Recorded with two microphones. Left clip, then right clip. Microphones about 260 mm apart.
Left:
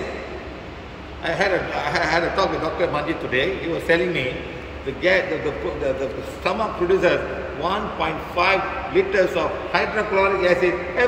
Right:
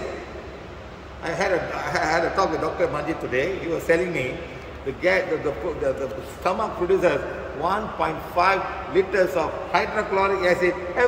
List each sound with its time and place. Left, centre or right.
1.2 s a man's voice: centre
6.4 s a man's voice: centre